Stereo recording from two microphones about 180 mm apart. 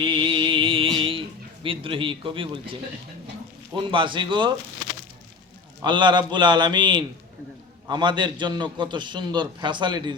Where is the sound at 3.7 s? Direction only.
25° right (ahead or behind).